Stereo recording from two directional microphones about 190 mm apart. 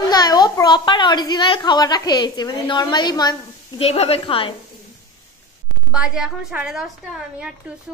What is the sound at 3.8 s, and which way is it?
Speech, 30° left (ahead or behind).